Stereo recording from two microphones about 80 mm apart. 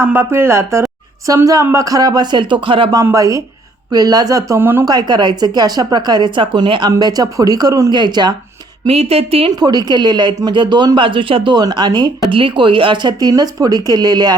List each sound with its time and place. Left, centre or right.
0.0 s speech: right
1.3 s speech: right
3.0 s speech: right
4.5 s speech: right
4.9 s speech: right
7.0 s speech: right
7.9 s speech: right
9.6 s speech: right
11.7 s speech: right
12.3 s speech: right